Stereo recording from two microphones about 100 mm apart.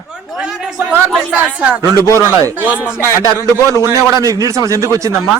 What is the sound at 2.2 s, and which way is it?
Speech, 30° right (ahead or behind).